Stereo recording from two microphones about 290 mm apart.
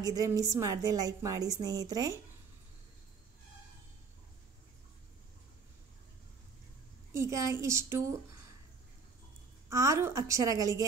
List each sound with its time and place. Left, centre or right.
0.0 s a woman's voice: centre
7.2 s a woman's voice: centre
9.7 s a woman's voice: centre